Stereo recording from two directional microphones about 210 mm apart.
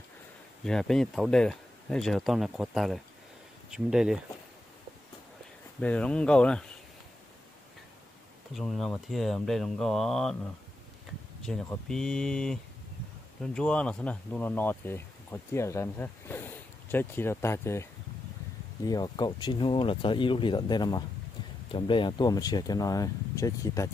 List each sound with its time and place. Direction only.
0.7 s speech: 5° left (ahead or behind)
5.8 s speech: 5° left (ahead or behind)
8.5 s speech: centre (ahead or behind)
18.9 s speech: 20° left (ahead or behind)